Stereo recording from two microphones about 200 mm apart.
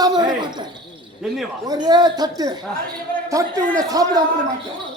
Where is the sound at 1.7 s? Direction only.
20° right (ahead or behind).